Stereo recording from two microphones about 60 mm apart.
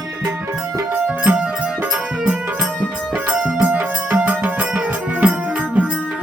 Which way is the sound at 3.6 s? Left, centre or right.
Right.